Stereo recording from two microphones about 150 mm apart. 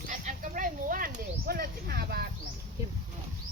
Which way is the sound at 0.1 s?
60° right (ahead or behind).